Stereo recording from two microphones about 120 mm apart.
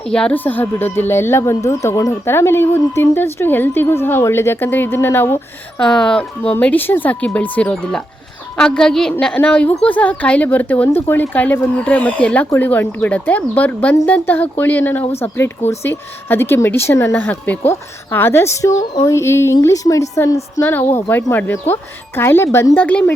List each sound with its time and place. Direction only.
0.0 s speech: 5° left (ahead or behind)
6.0 s a woman's voice: 10° left (ahead or behind)